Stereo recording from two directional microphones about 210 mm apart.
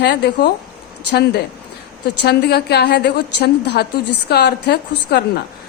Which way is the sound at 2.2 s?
50° left (ahead or behind).